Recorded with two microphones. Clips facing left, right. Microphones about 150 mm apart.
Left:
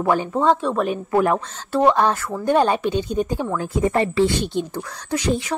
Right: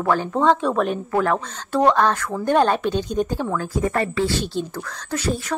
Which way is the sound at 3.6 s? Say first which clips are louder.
Left 5 dB; 25° left (ahead or behind).